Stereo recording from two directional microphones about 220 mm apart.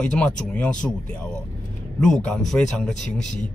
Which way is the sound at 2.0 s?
Centre (ahead or behind).